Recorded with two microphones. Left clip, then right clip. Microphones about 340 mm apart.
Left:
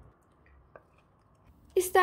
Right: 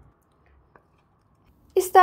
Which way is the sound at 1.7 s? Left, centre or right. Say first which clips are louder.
Right 8 dB; centre.